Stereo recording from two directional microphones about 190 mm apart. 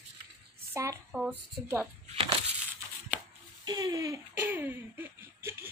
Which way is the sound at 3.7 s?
20° right (ahead or behind).